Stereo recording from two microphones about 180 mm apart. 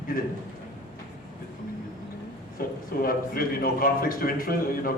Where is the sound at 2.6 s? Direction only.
55° left (ahead or behind).